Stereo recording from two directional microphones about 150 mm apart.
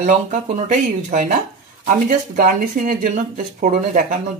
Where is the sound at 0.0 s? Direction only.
55° right (ahead or behind).